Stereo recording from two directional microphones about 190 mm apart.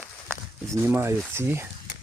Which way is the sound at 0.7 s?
15° right (ahead or behind).